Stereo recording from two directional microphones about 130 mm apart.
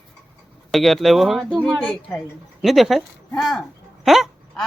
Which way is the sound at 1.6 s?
10° left (ahead or behind).